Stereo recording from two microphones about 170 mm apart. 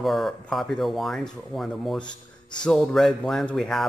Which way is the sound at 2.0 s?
25° left (ahead or behind).